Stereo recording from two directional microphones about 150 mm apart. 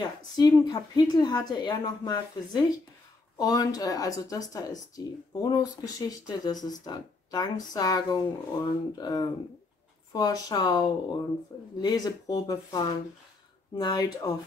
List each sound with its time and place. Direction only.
0.0 s speech: 25° left (ahead or behind)